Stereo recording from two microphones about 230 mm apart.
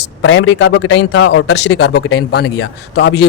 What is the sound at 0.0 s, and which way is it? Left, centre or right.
A man's voice, left.